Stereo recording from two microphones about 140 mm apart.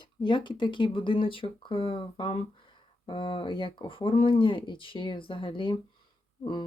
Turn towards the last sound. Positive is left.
turn(degrees=35)  # may be behind; listen again after turning